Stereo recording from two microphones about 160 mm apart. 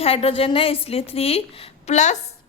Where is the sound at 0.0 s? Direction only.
35° left (ahead or behind).